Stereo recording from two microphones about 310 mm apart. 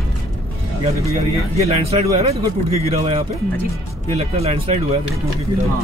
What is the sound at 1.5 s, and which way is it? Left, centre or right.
A man's voice, centre.